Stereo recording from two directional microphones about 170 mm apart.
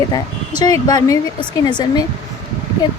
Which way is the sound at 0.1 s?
25° left (ahead or behind).